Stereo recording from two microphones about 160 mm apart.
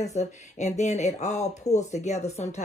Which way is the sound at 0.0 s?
45° left (ahead or behind).